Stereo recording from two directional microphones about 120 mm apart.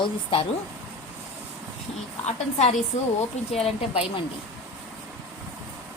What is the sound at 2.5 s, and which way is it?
A woman's voice, 65° left (ahead or behind).